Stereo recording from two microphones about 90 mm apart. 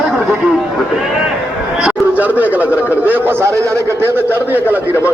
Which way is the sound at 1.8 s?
15° right (ahead or behind).